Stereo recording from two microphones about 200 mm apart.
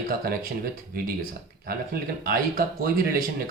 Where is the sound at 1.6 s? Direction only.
45° right (ahead or behind).